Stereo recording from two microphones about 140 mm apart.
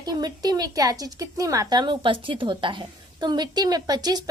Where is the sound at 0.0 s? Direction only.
30° right (ahead or behind).